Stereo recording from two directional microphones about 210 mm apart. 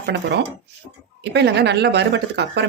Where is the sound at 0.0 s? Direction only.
55° right (ahead or behind).